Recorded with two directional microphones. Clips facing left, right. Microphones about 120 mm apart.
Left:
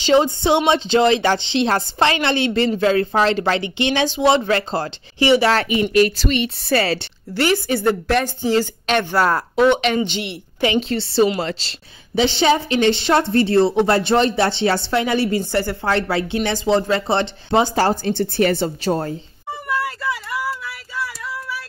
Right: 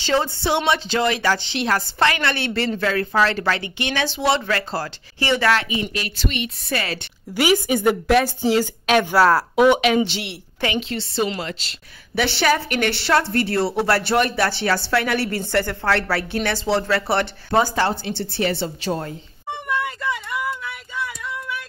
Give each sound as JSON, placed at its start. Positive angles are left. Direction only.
{"t": 0.0, "sound": "a woman's voice", "side_deg": 20}
{"t": 5.7, "sound": "speech", "side_deg": 65}
{"t": 6.0, "sound": "speech", "side_deg": 40}
{"t": 7.3, "sound": "a woman's voice", "side_deg": -10}
{"t": 10.8, "sound": "speech", "side_deg": 40}
{"t": 12.2, "sound": "a woman's voice", "side_deg": 20}
{"t": 17.7, "sound": "a woman's voice", "side_deg": 40}
{"t": 19.7, "sound": "a sound", "side_deg": 5}